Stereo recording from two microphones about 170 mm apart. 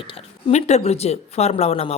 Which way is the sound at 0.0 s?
30° left (ahead or behind).